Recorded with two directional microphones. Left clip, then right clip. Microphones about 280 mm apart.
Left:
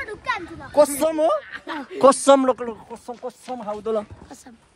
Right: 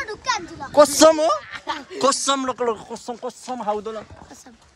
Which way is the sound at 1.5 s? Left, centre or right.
Right.